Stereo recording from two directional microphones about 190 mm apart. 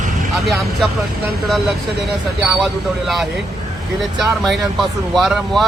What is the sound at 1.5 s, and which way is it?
Speech, centre (ahead or behind).